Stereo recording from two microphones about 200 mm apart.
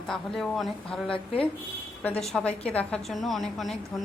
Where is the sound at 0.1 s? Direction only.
Centre (ahead or behind).